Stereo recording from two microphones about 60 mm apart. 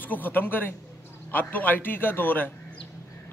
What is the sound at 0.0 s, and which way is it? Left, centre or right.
A man's voice, left.